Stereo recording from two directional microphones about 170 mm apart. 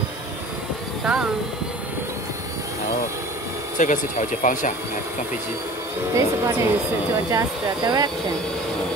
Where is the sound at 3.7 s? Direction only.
45° left (ahead or behind).